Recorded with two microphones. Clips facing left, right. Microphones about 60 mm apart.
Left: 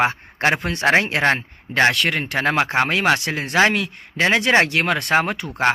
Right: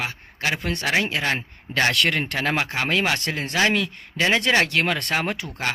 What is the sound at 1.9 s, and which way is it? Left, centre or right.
Speech, centre.